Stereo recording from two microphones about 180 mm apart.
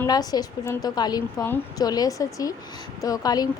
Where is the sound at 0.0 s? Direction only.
20° left (ahead or behind).